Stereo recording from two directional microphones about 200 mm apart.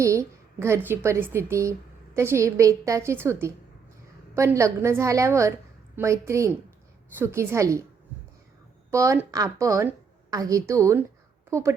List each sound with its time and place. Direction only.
0.0 s a woman's voice: 15° right (ahead or behind)
8.9 s a woman's voice: 15° right (ahead or behind)